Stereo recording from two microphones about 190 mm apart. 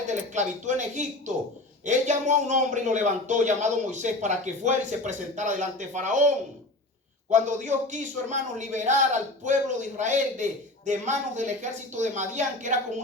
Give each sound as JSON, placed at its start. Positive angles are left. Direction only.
{"t": 0.1, "sound": "a man's voice", "side_deg": -40}